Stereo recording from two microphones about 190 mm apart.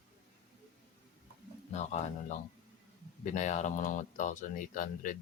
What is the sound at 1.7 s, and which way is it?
Speech, 35° left (ahead or behind).